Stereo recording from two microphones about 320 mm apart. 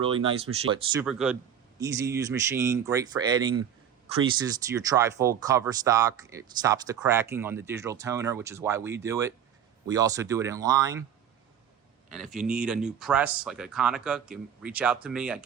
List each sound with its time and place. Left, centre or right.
0.0 s speech: centre
1.0 s speech: centre
12.1 s speech: centre